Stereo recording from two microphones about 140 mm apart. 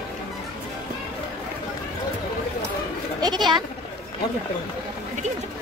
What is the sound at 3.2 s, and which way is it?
Goat, 30° right (ahead or behind).